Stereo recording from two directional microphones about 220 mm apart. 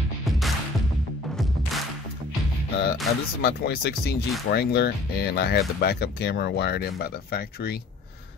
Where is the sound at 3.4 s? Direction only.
45° left (ahead or behind).